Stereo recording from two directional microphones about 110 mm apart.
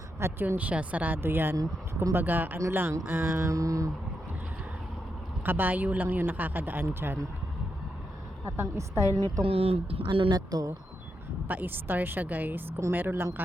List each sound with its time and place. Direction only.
0.2 s speech: 20° right (ahead or behind)
5.5 s speech: 15° right (ahead or behind)
8.4 s speech: 25° right (ahead or behind)
9.4 s speech: 65° right (ahead or behind); by 10.7 s 35° right (ahead or behind)
11.4 s speech: 15° right (ahead or behind)